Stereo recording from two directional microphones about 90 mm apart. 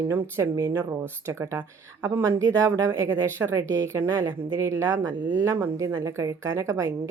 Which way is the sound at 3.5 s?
35° right (ahead or behind).